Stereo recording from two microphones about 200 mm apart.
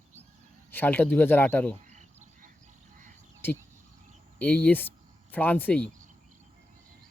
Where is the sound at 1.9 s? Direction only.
35° right (ahead or behind).